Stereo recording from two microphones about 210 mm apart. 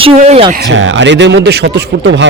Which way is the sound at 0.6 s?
60° right (ahead or behind).